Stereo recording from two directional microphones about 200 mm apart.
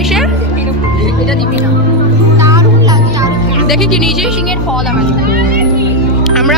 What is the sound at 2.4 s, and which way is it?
Music, 15° right (ahead or behind).